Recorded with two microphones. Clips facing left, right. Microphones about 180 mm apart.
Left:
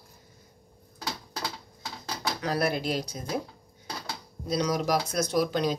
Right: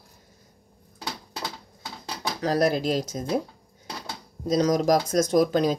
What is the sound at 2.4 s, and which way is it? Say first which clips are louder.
Speech: right 6 dB; 40° right (ahead or behind).